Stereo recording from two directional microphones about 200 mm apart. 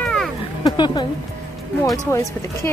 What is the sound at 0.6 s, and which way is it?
Speech, 20° left (ahead or behind).